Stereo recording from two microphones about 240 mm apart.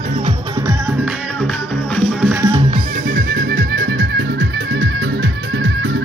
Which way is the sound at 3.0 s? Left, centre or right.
Right.